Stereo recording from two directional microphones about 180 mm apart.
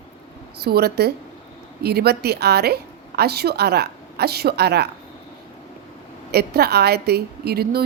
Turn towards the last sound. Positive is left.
turn(degrees=-60)  # may be behind; listen again after turning